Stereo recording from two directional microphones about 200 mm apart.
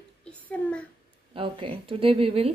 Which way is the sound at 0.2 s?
5° left (ahead or behind).